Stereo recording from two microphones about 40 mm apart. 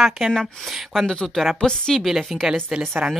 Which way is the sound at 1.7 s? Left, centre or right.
Left.